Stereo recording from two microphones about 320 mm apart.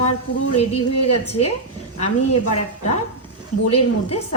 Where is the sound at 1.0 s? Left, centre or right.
Centre.